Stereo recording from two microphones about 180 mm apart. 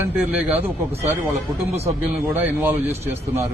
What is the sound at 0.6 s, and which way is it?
Speech, 35° right (ahead or behind).